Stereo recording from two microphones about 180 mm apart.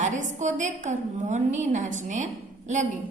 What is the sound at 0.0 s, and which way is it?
A woman's voice, 40° right (ahead or behind).